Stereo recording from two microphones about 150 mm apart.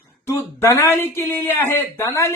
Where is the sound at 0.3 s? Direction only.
15° left (ahead or behind).